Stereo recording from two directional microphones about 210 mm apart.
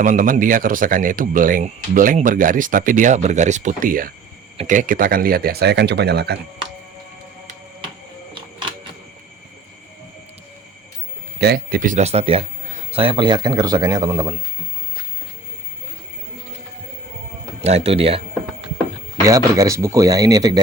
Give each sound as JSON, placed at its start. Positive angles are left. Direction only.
{"t": 0.0, "sound": "speech", "side_deg": -40}
{"t": 11.3, "sound": "a man's voice", "side_deg": -50}
{"t": 17.6, "sound": "a man's voice", "side_deg": -30}
{"t": 19.2, "sound": "speech", "side_deg": -15}